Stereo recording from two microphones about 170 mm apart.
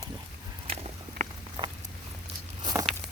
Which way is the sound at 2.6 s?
20° right (ahead or behind).